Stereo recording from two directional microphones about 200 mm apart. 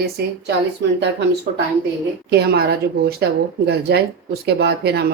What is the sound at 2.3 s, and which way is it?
Speech, 55° right (ahead or behind).